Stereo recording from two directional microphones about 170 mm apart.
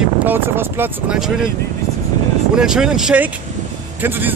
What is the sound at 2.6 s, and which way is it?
Speech, 5° right (ahead or behind).